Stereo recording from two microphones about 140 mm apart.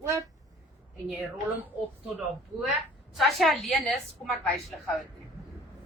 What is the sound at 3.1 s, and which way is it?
A woman's voice, centre (ahead or behind).